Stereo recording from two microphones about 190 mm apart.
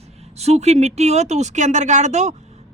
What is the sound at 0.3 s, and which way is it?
Speech, 35° right (ahead or behind).